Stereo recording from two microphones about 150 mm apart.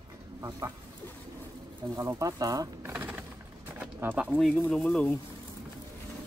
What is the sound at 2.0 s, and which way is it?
Speech, 20° right (ahead or behind).